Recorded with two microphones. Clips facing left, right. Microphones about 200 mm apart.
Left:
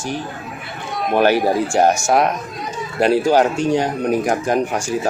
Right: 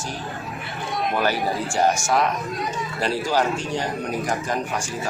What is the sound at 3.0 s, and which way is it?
Speech, 55° left (ahead or behind).